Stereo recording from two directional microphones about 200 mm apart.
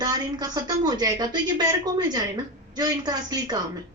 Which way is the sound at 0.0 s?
20° right (ahead or behind).